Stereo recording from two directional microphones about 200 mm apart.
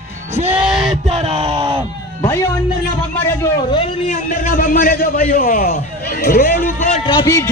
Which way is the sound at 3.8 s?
40° left (ahead or behind).